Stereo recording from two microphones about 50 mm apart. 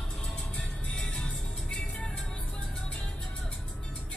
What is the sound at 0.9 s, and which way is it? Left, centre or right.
Music, left.